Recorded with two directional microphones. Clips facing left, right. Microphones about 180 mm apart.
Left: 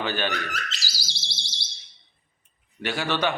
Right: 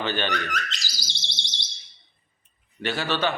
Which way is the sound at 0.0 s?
10° left (ahead or behind).